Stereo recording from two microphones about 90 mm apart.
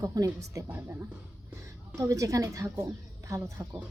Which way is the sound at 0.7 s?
20° right (ahead or behind).